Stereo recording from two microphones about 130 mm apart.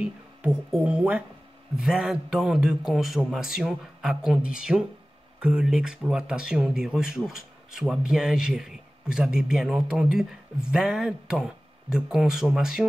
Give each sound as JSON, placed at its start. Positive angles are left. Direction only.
{"t": 0.0, "sound": "speech", "side_deg": -10}